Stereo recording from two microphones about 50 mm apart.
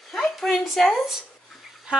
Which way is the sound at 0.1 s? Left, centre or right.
Centre.